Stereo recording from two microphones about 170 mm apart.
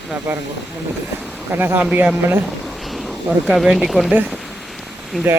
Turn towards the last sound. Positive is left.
turn(degrees=-5)  # may be behind; listen again after turning